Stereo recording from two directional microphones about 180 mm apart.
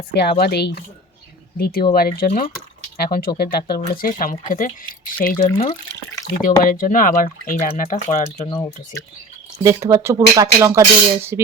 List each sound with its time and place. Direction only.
0.1 s speech: 60° left (ahead or behind)
6.4 s speech: 50° left (ahead or behind)
8.4 s speech: 20° left (ahead or behind)
9.6 s speech: 15° right (ahead or behind)